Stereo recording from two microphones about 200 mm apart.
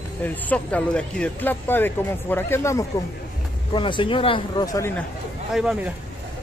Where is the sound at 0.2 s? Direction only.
5° left (ahead or behind); by 4.6 s 25° left (ahead or behind).